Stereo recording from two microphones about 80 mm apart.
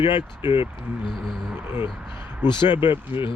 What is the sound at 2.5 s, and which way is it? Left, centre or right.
Speech, left.